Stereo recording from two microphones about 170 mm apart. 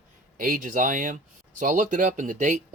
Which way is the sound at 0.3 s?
55° right (ahead or behind).